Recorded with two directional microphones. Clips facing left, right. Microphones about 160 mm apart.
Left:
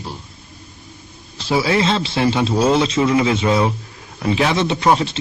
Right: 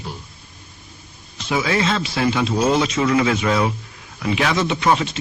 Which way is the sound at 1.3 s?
35° left (ahead or behind).